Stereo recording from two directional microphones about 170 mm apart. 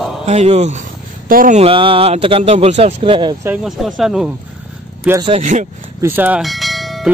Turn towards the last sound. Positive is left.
turn(degrees=0)  # may be behind; listen again after turning